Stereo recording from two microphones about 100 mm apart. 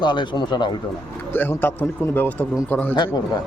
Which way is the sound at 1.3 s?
20° left (ahead or behind).